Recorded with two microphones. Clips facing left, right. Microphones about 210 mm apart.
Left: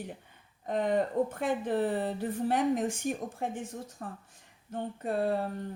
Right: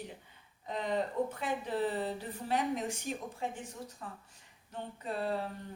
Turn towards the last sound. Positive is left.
turn(degrees=50)  # may be behind; listen again after turning